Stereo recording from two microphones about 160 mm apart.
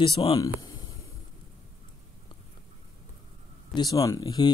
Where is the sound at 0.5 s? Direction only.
25° left (ahead or behind).